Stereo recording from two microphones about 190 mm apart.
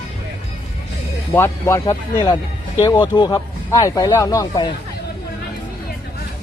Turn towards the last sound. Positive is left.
turn(degrees=20)  # may be behind; listen again after turning